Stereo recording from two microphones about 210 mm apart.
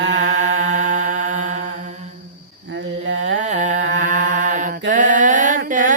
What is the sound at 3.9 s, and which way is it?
Mantra, 40° right (ahead or behind).